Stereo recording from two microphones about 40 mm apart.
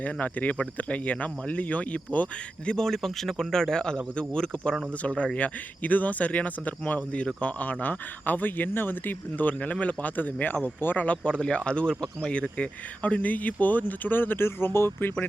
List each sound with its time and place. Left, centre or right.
0.0 s speech: left
2.6 s speech: centre; by 5.5 s left
5.8 s speech: left
9.5 s speech: left
10.8 s speech: left
11.0 s speech: left